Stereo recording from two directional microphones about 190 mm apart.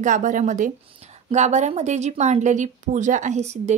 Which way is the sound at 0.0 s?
40° right (ahead or behind).